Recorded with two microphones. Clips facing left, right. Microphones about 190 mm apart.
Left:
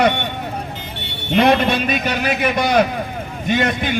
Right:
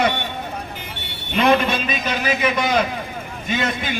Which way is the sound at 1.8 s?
60° left (ahead or behind).